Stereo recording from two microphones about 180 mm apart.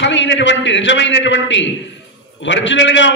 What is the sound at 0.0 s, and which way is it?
A man's voice, 90° left.